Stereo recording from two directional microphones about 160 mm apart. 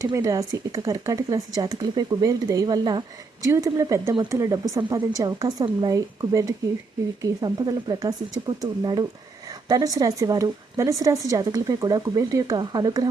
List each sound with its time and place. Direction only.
0.0 s a woman's voice: 20° right (ahead or behind)